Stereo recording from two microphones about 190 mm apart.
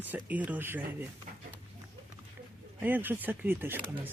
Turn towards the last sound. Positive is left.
turn(degrees=-10)  # may be behind; listen again after turning